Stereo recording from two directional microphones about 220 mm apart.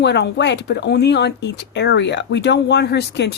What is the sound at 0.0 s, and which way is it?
Speech, 50° left (ahead or behind).